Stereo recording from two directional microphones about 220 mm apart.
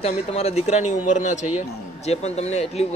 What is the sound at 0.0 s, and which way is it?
A man's voice, 30° left (ahead or behind).